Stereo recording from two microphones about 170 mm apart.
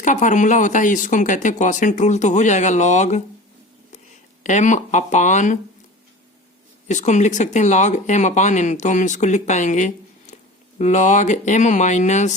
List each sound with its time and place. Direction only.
0.0 s speech: 50° left (ahead or behind)
4.4 s speech: 45° left (ahead or behind)
6.8 s speech: 45° left (ahead or behind)